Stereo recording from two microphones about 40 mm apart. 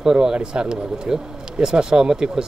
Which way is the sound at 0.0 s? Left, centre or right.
Centre.